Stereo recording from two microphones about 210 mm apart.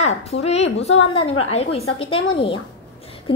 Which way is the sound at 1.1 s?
30° left (ahead or behind).